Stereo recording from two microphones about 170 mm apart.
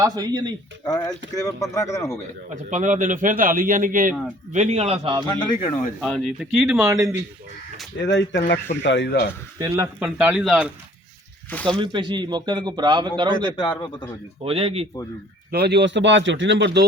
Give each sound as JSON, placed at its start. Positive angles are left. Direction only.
{"t": 0.0, "sound": "a man's voice", "side_deg": -20}
{"t": 0.9, "sound": "a man's voice", "side_deg": 20}
{"t": 2.5, "sound": "a man's voice", "side_deg": -45}
{"t": 6.0, "sound": "speech", "side_deg": 0}
{"t": 6.8, "sound": "a man's voice", "side_deg": -20}
{"t": 8.0, "sound": "speech", "side_deg": 90}
{"t": 9.6, "sound": "speech", "side_deg": -20}
{"t": 10.1, "sound": "speech", "side_deg": -5}
{"t": 11.8, "sound": "a man's voice", "side_deg": -25}
{"t": 13.6, "sound": "a man's voice", "side_deg": 25}
{"t": 14.4, "sound": "a man's voice", "side_deg": -35}
{"t": 15.5, "sound": "a man's voice", "side_deg": -80}